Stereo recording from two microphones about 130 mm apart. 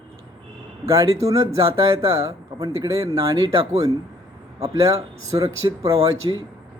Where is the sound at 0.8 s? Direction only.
25° right (ahead or behind).